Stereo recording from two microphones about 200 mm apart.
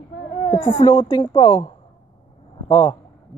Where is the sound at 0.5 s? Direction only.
25° left (ahead or behind).